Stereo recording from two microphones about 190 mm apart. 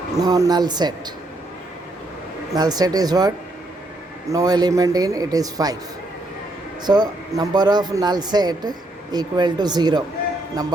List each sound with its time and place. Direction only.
0.2 s speech: 20° right (ahead or behind)
2.5 s speech: 20° right (ahead or behind)
6.8 s speech: 20° right (ahead or behind)